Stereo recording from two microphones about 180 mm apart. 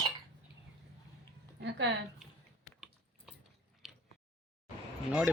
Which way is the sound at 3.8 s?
Centre (ahead or behind).